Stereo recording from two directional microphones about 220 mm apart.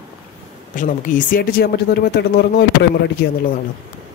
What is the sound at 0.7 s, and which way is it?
Speech, 35° left (ahead or behind).